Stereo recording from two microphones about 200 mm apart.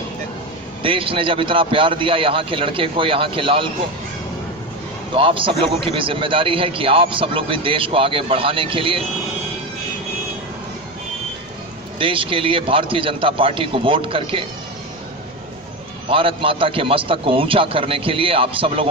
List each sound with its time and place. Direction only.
0.8 s a man's voice: 25° right (ahead or behind)
5.1 s a man's voice: 25° right (ahead or behind)
11.9 s a man's voice: 25° right (ahead or behind)
16.0 s a man's voice: 25° right (ahead or behind)